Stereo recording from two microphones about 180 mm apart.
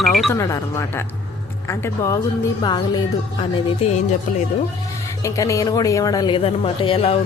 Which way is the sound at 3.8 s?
30° left (ahead or behind).